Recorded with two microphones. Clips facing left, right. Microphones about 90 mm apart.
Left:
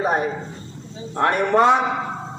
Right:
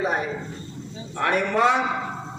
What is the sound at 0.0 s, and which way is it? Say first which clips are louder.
A man's voice: left 4 dB; 35° left (ahead or behind).